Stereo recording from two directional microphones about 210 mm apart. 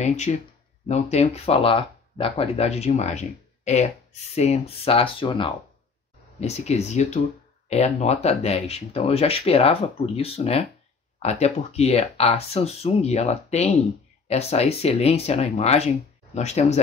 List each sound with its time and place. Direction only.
0.0 s speech: 35° left (ahead or behind)